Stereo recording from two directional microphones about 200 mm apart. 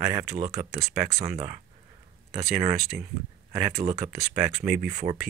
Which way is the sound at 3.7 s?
35° right (ahead or behind).